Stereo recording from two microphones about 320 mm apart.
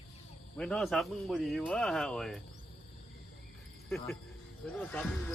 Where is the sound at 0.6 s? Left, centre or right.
Centre.